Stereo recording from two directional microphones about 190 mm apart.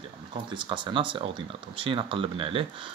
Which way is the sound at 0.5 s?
25° right (ahead or behind).